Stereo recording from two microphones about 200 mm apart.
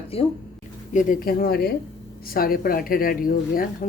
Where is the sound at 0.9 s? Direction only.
40° left (ahead or behind).